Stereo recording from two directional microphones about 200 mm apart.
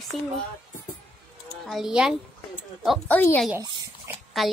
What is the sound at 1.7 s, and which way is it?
A woman's voice, centre (ahead or behind).